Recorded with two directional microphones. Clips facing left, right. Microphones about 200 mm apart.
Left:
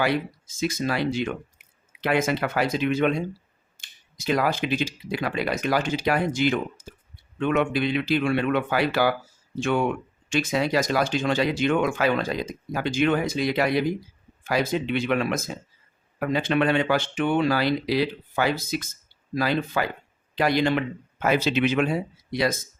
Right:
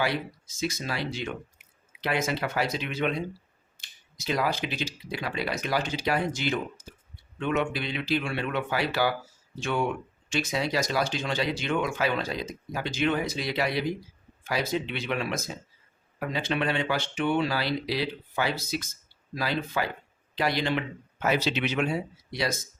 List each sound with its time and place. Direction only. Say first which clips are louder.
0.0 s speech: left 4 dB; 50° left (ahead or behind)